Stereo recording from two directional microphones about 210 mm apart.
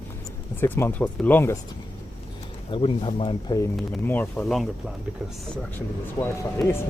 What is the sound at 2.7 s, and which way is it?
Speech, 25° left (ahead or behind).